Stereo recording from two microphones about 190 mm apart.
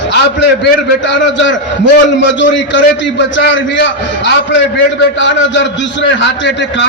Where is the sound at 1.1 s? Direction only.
70° left (ahead or behind).